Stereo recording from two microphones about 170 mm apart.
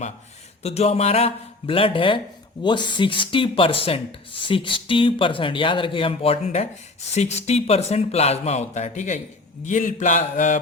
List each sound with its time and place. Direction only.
0.6 s speech: 40° left (ahead or behind)
9.6 s mantra: 50° left (ahead or behind)